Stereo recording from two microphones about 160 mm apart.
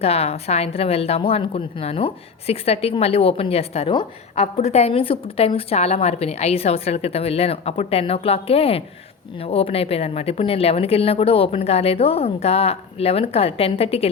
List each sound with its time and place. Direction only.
0.0 s a woman's voice: 40° left (ahead or behind)